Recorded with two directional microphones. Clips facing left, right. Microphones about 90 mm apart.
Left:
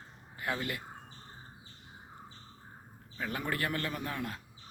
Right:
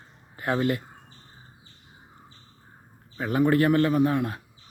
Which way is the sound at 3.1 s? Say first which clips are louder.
Right 14 dB; 25° right (ahead or behind).